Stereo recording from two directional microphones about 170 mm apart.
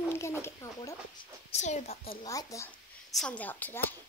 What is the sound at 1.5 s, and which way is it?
Speech, 40° left (ahead or behind).